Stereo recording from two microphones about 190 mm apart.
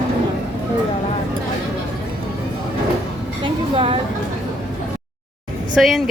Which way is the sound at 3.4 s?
30° right (ahead or behind).